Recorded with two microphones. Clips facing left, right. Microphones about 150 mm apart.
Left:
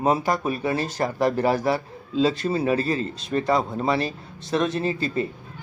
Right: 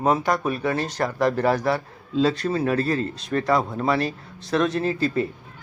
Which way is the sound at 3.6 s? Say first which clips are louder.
Even; 25° left (ahead or behind).